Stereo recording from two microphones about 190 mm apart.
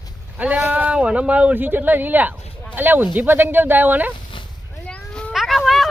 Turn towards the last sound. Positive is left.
turn(degrees=0)  # may be behind; listen again after turning